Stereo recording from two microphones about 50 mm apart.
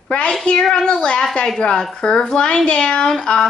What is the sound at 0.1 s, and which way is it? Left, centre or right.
A child's voice, left.